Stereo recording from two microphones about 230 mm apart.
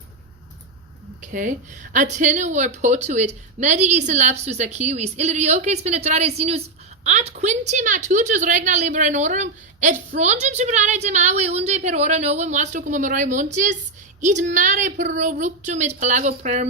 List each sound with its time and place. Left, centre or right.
1.2 s a woman's voice: right